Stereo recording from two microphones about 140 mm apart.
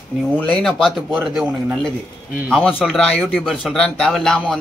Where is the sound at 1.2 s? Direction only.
10° right (ahead or behind).